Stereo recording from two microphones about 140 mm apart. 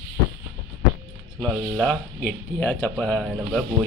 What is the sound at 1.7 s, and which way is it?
Speech, 5° left (ahead or behind).